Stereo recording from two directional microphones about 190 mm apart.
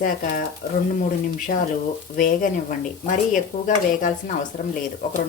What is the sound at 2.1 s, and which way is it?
Speech, 45° left (ahead or behind).